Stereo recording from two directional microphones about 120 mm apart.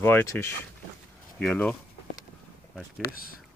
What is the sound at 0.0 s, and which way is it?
Speech, 20° left (ahead or behind).